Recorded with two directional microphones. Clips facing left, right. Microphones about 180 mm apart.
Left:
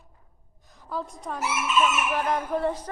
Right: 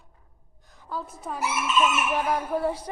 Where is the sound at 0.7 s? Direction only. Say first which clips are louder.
Left 2 dB; centre (ahead or behind).